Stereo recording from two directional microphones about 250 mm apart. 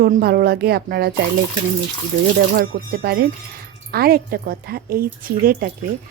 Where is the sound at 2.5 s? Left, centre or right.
Right.